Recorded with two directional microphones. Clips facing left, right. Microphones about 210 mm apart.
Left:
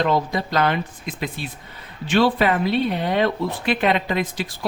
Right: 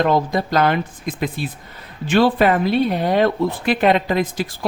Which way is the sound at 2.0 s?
45° right (ahead or behind).